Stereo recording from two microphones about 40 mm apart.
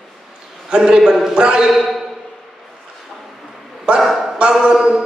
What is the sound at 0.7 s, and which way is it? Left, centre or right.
Speech, right.